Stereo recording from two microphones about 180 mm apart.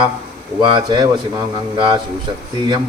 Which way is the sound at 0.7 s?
25° right (ahead or behind).